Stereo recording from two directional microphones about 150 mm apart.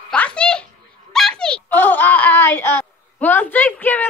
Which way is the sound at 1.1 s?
5° left (ahead or behind).